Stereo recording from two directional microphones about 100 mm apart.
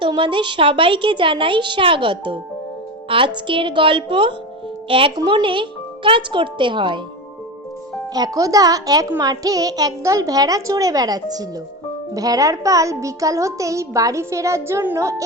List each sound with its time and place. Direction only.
0.0 s speech: 55° right (ahead or behind)
5.1 s speech: 45° right (ahead or behind)
8.1 s a child's voice: 40° right (ahead or behind)